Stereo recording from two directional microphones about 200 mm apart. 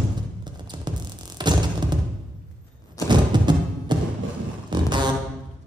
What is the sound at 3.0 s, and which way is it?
Music, 20° right (ahead or behind).